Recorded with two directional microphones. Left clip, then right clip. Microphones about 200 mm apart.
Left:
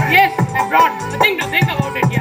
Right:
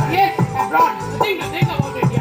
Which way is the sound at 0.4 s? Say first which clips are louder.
Left 2 dB; 25° left (ahead or behind).